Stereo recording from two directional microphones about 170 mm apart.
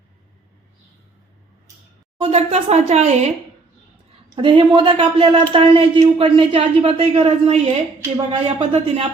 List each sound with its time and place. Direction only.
2.1 s speech: 35° right (ahead or behind)
4.4 s speech: 30° right (ahead or behind)